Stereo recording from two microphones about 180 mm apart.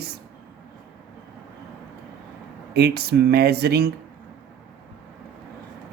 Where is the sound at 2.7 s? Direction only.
60° right (ahead or behind).